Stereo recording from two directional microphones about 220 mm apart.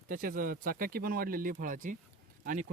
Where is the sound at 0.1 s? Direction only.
40° right (ahead or behind).